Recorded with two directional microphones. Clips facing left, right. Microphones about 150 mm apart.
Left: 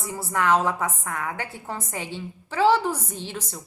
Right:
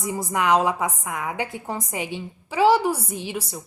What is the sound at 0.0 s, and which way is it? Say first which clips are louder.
A woman's voice: right 2 dB; 15° right (ahead or behind).